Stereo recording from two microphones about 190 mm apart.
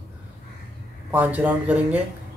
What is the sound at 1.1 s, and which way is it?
Speech, 10° right (ahead or behind).